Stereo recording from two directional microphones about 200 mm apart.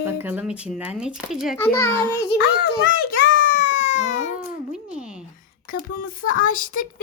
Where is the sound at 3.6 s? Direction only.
35° left (ahead or behind).